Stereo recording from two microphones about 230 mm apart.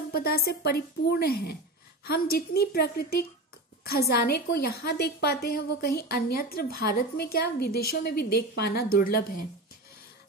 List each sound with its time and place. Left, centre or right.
0.1 s a woman's voice: left